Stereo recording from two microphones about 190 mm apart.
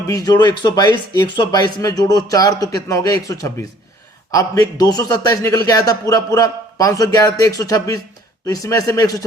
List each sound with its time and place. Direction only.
0.1 s a man's voice: 20° left (ahead or behind)